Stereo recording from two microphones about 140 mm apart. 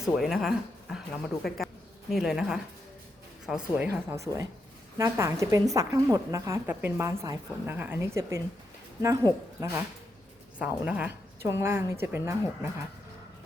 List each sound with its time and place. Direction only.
0.0 s speech: centre (ahead or behind)
4.1 s a woman's voice: 20° right (ahead or behind)
10.6 s a woman's voice: 10° right (ahead or behind)